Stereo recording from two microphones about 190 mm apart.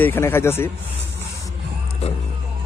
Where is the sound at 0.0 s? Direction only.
10° left (ahead or behind).